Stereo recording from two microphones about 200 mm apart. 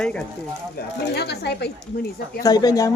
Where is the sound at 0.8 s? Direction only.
55° left (ahead or behind).